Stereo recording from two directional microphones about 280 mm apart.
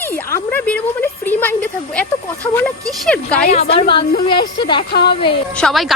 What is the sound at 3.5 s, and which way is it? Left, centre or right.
A woman's voice, left.